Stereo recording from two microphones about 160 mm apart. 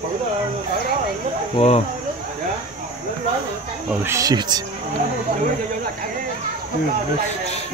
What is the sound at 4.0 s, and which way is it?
Speech, 20° right (ahead or behind).